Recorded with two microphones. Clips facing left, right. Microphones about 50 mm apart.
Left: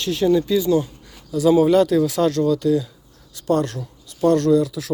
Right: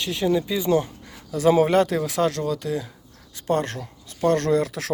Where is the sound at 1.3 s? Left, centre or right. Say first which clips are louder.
Left 3 dB; right.